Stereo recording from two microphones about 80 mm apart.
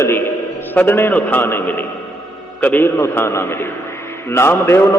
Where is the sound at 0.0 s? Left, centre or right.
Left.